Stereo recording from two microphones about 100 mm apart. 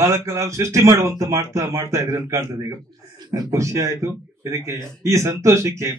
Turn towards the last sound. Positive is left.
turn(degrees=-30)  # may be behind; listen again after turning